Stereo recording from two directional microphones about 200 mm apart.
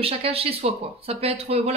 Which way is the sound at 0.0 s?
30° right (ahead or behind).